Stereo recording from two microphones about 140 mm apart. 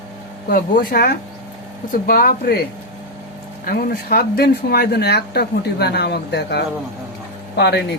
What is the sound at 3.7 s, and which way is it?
Speech, 90° left.